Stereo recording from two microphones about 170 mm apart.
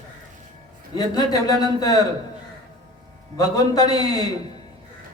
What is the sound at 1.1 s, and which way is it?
Speech, 25° left (ahead or behind).